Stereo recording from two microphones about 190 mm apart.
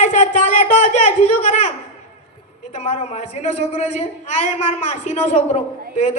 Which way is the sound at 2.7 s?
35° left (ahead or behind).